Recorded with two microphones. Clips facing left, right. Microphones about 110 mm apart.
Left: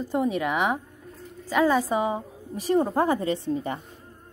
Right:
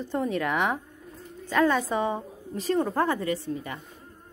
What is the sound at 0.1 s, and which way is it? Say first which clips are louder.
A woman's voice: left 2 dB; 10° left (ahead or behind).